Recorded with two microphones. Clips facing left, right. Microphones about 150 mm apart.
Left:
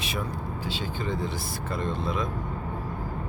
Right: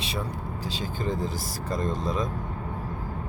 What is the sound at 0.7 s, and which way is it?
Speech, 40° right (ahead or behind).